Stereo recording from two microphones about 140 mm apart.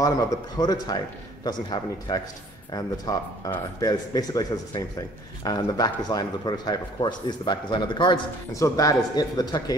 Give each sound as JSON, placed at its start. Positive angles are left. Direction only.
{"t": 0.0, "sound": "a man's voice", "side_deg": 25}